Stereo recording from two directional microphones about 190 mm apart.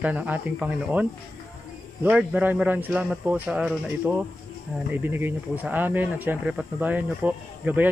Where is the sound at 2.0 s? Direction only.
10° right (ahead or behind).